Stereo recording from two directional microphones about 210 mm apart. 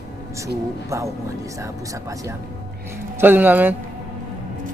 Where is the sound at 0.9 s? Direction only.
15° right (ahead or behind).